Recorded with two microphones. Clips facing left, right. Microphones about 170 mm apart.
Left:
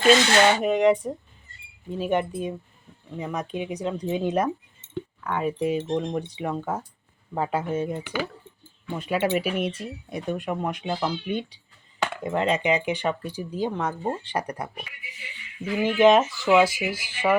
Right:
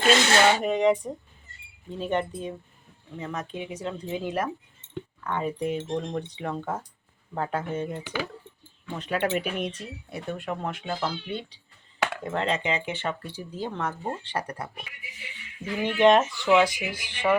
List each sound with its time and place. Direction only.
0.6 s speech: centre (ahead or behind); by 4.4 s 20° left (ahead or behind)
4.9 s speech: 10° left (ahead or behind)
15.8 s speech: 5° left (ahead or behind)